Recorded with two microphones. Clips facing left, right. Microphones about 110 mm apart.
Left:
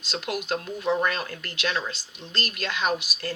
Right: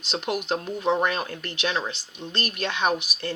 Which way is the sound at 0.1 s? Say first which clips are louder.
Right 2 dB; 20° right (ahead or behind).